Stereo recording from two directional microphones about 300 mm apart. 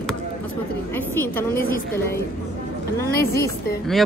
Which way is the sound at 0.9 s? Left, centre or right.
Centre.